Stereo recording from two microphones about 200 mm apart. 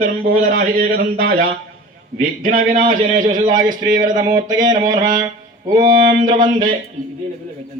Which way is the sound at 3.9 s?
40° right (ahead or behind).